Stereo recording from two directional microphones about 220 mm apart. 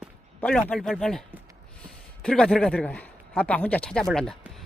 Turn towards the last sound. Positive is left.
turn(degrees=0)  # may be behind; listen again after turning